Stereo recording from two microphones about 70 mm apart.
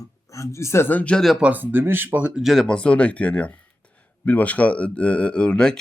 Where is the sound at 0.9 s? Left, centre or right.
Left.